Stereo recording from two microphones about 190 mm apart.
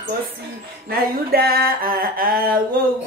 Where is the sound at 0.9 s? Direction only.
50° right (ahead or behind).